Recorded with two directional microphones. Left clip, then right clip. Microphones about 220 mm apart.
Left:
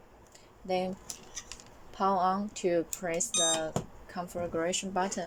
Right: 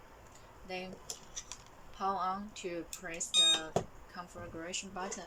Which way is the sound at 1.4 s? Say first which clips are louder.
Left 3 dB; centre (ahead or behind).